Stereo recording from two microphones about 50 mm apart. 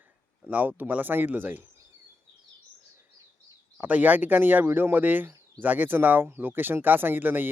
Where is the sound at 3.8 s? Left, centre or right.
Right.